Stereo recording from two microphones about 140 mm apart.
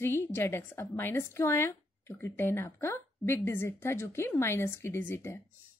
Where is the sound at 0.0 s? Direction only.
15° left (ahead or behind).